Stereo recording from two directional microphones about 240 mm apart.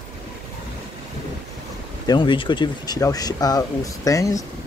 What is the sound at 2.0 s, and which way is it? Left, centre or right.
Speech, centre.